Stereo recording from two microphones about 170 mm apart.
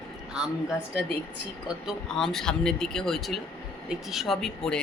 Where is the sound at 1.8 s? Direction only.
5° left (ahead or behind).